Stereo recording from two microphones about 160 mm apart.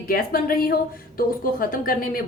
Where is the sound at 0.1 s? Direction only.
65° left (ahead or behind).